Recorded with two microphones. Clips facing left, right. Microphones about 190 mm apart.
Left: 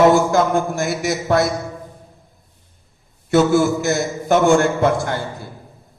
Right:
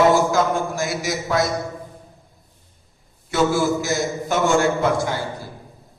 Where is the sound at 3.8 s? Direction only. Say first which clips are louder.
Left 3 dB; 55° left (ahead or behind).